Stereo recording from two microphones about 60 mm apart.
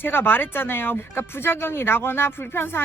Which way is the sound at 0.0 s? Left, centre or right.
Left.